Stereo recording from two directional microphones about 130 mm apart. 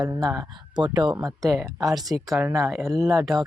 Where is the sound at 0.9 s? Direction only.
30° right (ahead or behind).